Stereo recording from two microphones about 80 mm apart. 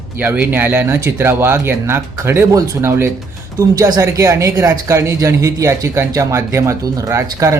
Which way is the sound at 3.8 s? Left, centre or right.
Right.